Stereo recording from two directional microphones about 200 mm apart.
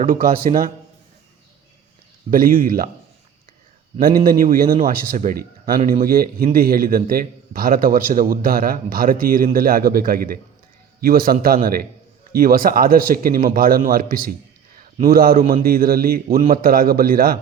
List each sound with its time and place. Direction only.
0.1 s a man's voice: 45° right (ahead or behind)
2.3 s a man's voice: 45° right (ahead or behind)
3.9 s a man's voice: 45° right (ahead or behind)